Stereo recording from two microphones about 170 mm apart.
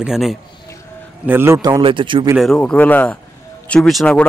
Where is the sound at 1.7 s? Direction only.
30° right (ahead or behind).